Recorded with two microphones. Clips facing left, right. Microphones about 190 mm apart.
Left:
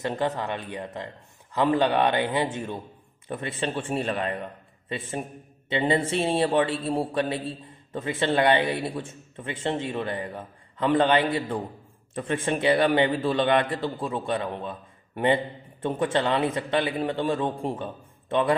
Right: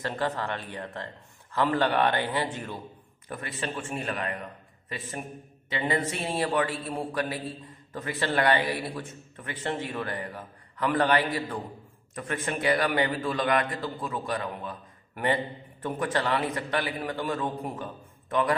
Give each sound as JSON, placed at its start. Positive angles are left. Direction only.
{"t": 0.0, "sound": "a man's voice", "side_deg": 20}